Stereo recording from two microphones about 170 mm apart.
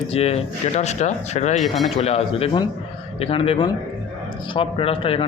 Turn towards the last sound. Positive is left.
turn(degrees=35)  # may be behind; listen again after turning